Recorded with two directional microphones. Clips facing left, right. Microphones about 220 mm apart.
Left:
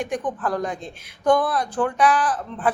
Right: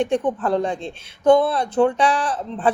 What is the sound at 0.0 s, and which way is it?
Speech, 25° right (ahead or behind).